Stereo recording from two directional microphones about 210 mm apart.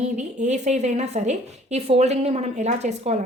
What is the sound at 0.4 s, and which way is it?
A woman's voice, 35° right (ahead or behind).